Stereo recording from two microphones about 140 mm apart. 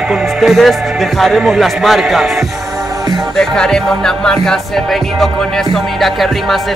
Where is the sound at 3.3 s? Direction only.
5° left (ahead or behind).